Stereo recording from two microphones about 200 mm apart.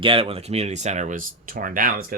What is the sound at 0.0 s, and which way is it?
Speech, 25° right (ahead or behind).